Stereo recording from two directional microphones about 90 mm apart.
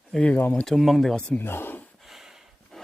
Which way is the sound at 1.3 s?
25° left (ahead or behind).